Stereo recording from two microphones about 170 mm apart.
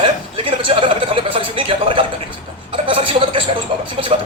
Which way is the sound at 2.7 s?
30° right (ahead or behind).